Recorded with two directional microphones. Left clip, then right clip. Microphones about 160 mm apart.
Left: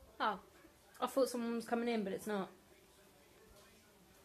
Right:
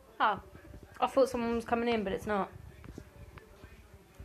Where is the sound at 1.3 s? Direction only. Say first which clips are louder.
Right 7 dB; 45° left (ahead or behind).